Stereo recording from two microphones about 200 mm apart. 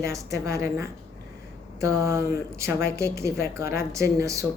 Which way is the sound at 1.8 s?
15° right (ahead or behind).